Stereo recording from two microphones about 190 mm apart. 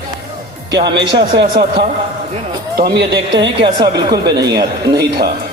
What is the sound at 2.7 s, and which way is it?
Speech, 60° right (ahead or behind).